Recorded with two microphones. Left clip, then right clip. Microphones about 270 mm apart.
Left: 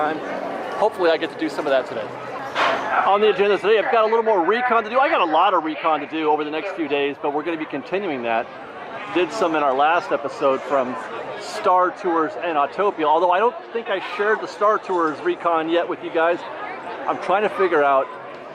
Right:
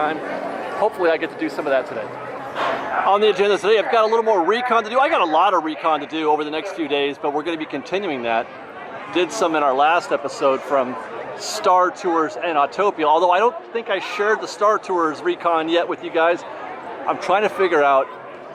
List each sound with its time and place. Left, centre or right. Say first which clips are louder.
0.8 s a man's voice: even; right
1.0 s speech: even; centre
2.6 s speech: left 2 dB; centre
11.8 s speech: right 1 dB; centre
13.1 s a man's voice: right 2 dB; right
13.3 s speech: right 2 dB; centre